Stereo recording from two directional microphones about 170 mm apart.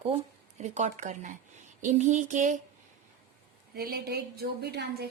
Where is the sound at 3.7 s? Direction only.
70° right (ahead or behind).